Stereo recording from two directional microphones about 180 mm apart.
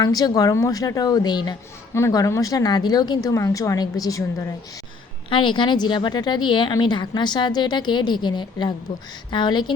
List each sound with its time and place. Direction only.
0.0 s speech: 20° left (ahead or behind)